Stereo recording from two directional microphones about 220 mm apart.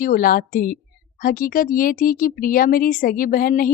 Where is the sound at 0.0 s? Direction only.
40° left (ahead or behind).